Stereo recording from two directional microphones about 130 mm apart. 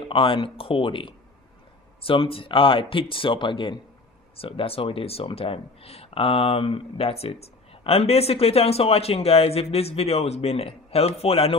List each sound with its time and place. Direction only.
0.1 s speech: 45° left (ahead or behind)